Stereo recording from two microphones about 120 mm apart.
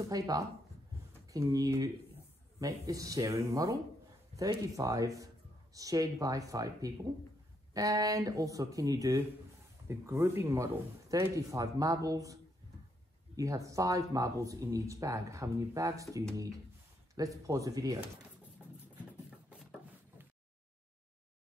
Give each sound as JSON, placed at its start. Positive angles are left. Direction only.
{"t": 0.0, "sound": "speech", "side_deg": -30}
{"t": 13.4, "sound": "speech", "side_deg": -25}